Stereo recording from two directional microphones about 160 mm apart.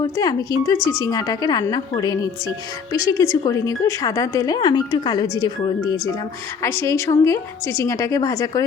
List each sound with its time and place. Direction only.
0.0 s a woman's voice: 25° left (ahead or behind)
6.6 s a woman's voice: 15° left (ahead or behind)